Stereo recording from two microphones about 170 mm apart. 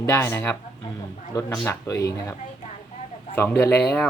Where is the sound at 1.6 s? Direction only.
15° left (ahead or behind).